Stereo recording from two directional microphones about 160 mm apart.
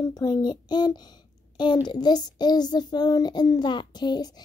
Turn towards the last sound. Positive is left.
turn(degrees=25)  # may be behind; listen again after turning